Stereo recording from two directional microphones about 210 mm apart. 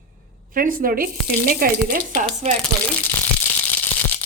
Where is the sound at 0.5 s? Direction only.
40° right (ahead or behind).